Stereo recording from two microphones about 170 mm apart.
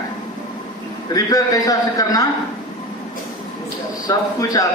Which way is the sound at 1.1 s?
20° left (ahead or behind).